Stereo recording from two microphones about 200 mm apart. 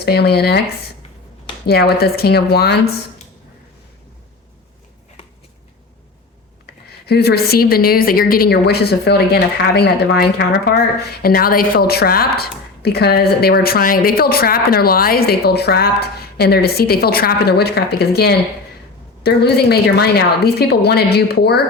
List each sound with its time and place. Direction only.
0.0 s a woman's voice: 55° left (ahead or behind)
1.6 s a woman's voice: 50° left (ahead or behind)
7.1 s a woman's voice: 55° left (ahead or behind)